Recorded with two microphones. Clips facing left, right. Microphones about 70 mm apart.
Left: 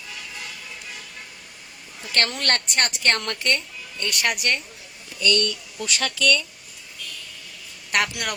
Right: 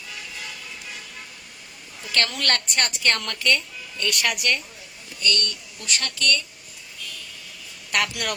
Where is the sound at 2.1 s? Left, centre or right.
Left.